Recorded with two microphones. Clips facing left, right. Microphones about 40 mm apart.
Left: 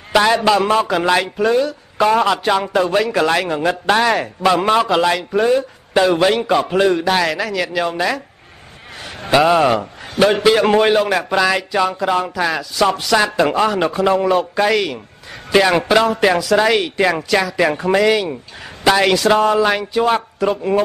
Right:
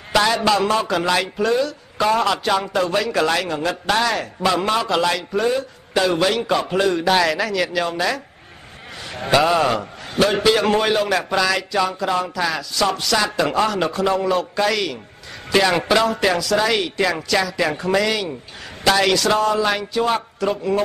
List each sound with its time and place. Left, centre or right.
0.1 s a sound: centre
0.5 s a man's voice: centre
6.8 s a man's voice: centre
9.3 s a man's voice: centre